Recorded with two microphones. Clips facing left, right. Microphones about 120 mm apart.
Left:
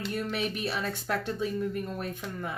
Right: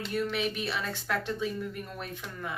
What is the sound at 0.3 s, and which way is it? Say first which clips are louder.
Speech: even; 45° left (ahead or behind).